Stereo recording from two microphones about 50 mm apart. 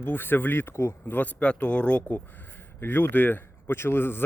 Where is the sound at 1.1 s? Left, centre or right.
Left.